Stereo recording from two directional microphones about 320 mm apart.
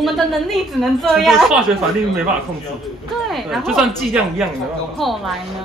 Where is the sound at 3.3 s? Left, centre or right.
Centre.